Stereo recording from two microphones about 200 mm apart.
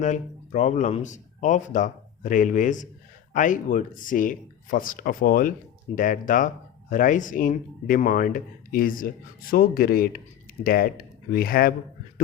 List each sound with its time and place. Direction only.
0.0 s speech: 40° left (ahead or behind)